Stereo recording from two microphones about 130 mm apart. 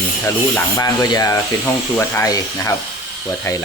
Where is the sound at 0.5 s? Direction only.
25° left (ahead or behind).